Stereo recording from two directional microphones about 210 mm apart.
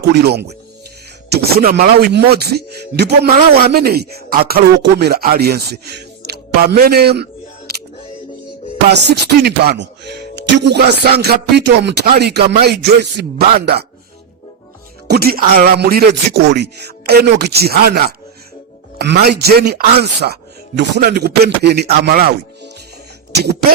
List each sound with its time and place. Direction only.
0.1 s speech: 50° right (ahead or behind)
7.7 s camera: 45° right (ahead or behind)
8.9 s speech: 50° right (ahead or behind)
15.0 s speech: 50° right (ahead or behind)